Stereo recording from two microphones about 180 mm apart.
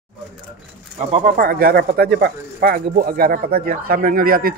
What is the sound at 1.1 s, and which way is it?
Speech, 50° right (ahead or behind).